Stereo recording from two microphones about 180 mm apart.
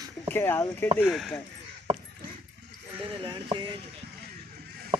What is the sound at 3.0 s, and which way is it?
Speech, 25° right (ahead or behind).